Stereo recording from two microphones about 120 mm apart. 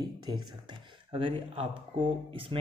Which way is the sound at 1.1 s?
45° right (ahead or behind).